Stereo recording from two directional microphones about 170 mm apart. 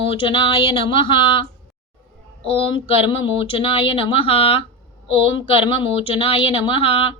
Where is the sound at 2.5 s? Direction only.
30° left (ahead or behind).